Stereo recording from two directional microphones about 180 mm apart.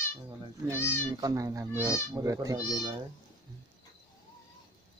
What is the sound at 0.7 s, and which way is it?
Speech, 15° left (ahead or behind).